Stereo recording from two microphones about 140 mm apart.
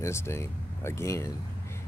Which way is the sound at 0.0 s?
20° left (ahead or behind).